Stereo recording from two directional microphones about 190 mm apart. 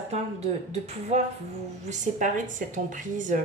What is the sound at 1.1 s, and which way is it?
A woman's voice, 35° right (ahead or behind).